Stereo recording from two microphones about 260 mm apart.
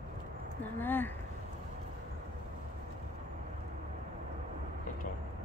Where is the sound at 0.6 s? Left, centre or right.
Centre.